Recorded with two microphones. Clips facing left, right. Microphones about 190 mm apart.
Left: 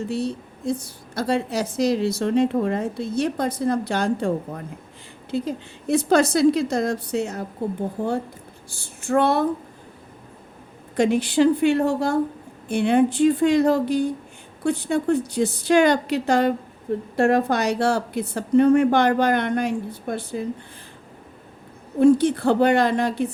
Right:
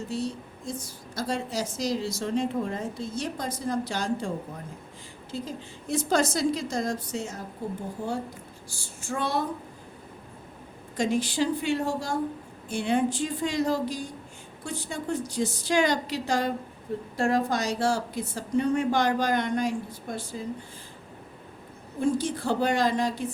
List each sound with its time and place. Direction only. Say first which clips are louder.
0.1 s a woman's voice: left 5 dB; 65° left (ahead or behind)
8.7 s a woman's voice: left 12 dB; 60° left (ahead or behind)
10.9 s a woman's voice: left 7 dB; 65° left (ahead or behind)
22.0 s a woman's voice: left 10 dB; 60° left (ahead or behind)